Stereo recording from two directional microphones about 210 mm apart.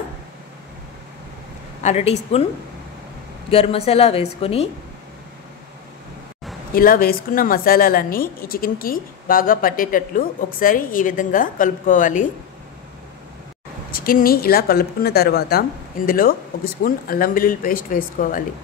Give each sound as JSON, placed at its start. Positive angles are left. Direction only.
{"t": 1.8, "sound": "a woman's voice", "side_deg": 30}
{"t": 3.4, "sound": "speech", "side_deg": 30}
{"t": 6.7, "sound": "a woman's voice", "side_deg": 45}
{"t": 13.9, "sound": "a woman's voice", "side_deg": 45}